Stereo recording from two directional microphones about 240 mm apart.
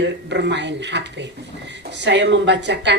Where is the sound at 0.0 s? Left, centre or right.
Right.